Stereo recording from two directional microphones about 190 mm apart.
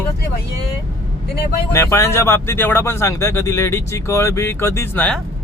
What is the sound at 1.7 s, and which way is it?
Speech, 15° left (ahead or behind).